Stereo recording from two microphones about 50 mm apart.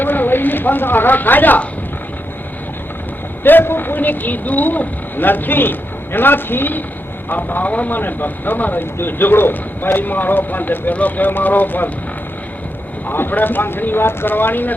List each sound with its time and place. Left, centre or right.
0.0 s speech: left
3.4 s speech: left
13.1 s speech: left